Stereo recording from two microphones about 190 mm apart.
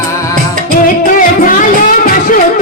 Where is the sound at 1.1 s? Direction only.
45° left (ahead or behind).